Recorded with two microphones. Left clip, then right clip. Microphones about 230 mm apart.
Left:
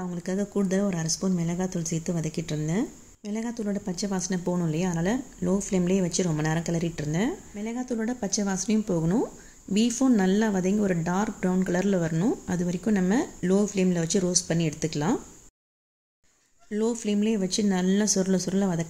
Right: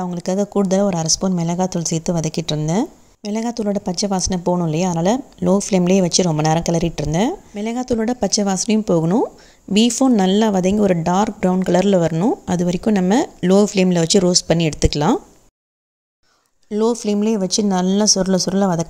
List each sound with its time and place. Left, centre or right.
0.0 s speech: right
16.7 s speech: right